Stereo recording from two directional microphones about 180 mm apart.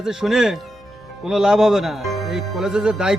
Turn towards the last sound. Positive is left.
turn(degrees=-5)  # may be behind; listen again after turning